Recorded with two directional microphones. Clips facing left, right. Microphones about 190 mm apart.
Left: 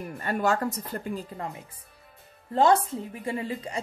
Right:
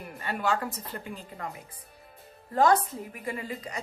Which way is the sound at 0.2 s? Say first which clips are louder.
Left 3 dB; 45° left (ahead or behind).